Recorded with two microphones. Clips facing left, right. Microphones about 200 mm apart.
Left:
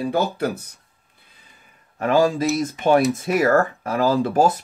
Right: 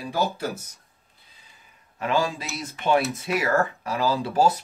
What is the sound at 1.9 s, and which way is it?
A man's voice, 45° left (ahead or behind).